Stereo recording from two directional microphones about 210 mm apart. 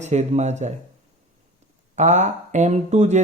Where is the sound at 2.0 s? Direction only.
35° right (ahead or behind).